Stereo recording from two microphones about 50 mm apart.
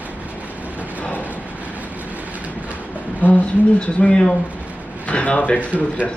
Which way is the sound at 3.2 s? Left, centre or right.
Left.